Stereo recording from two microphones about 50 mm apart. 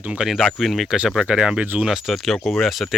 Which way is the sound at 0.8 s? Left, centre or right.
Centre.